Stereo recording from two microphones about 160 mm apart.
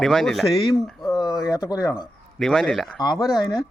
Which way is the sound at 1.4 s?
25° left (ahead or behind).